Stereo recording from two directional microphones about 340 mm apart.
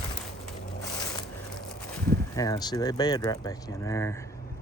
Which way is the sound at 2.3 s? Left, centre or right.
Centre.